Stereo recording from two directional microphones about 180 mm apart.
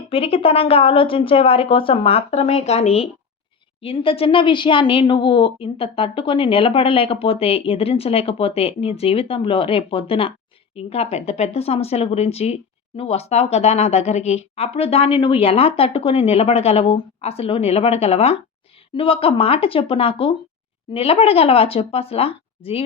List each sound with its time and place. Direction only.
0.1 s a woman's voice: 30° left (ahead or behind)